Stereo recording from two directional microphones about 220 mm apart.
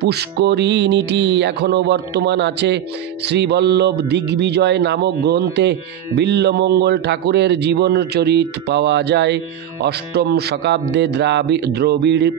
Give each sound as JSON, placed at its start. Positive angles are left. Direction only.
{"t": 0.0, "sound": "speech", "side_deg": -50}